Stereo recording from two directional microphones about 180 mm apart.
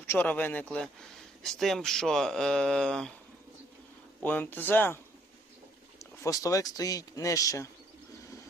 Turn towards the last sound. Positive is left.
turn(degrees=15)  # may be behind; listen again after turning